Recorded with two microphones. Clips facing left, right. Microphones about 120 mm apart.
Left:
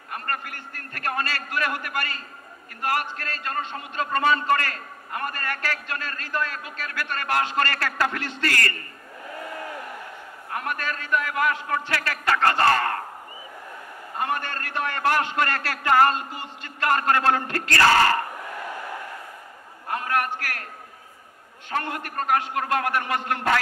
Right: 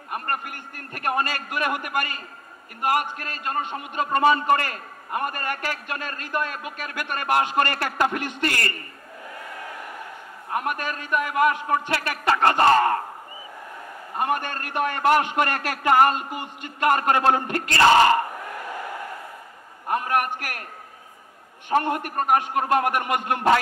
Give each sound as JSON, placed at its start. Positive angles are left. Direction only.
{"t": 0.1, "sound": "a man's voice", "side_deg": -20}
{"t": 10.5, "sound": "a man's voice", "side_deg": -15}
{"t": 14.1, "sound": "a man's voice", "side_deg": -15}
{"t": 19.9, "sound": "a man's voice", "side_deg": -15}
{"t": 21.6, "sound": "a man's voice", "side_deg": -20}